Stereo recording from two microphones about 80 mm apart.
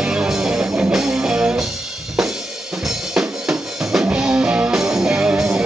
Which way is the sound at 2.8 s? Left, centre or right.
Centre.